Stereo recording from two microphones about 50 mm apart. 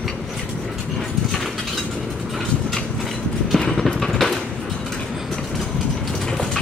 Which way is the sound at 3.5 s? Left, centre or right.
Centre.